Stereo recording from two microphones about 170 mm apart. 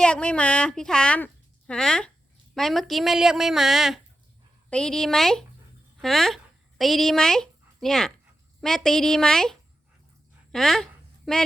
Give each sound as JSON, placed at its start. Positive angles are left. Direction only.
{"t": 0.0, "sound": "a woman's voice", "side_deg": 5}